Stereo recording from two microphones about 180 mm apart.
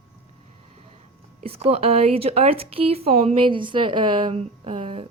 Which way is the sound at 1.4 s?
35° right (ahead or behind).